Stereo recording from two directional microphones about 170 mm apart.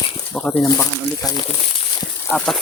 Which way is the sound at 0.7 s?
20° left (ahead or behind).